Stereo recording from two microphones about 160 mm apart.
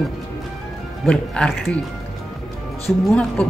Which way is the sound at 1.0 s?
5° left (ahead or behind).